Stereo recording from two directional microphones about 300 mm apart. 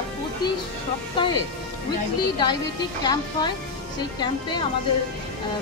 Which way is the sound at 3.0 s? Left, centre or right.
Centre.